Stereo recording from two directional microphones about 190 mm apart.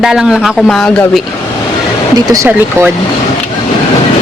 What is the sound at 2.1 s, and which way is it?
Speech, 15° right (ahead or behind).